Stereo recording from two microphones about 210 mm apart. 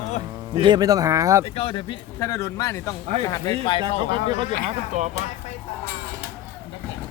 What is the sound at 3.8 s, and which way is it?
Speech, 25° right (ahead or behind).